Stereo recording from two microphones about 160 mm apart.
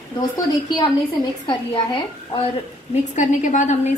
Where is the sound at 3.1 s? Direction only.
50° left (ahead or behind).